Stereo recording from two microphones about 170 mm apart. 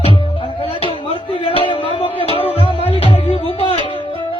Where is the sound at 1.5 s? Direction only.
30° left (ahead or behind).